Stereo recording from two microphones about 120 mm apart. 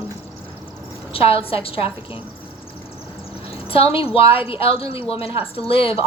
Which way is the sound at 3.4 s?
50° left (ahead or behind).